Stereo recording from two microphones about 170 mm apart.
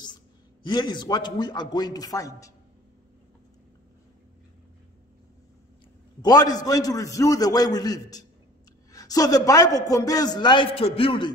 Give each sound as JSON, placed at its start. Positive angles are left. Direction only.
{"t": 0.7, "sound": "a man's voice", "side_deg": 25}
{"t": 6.2, "sound": "a man's voice", "side_deg": 20}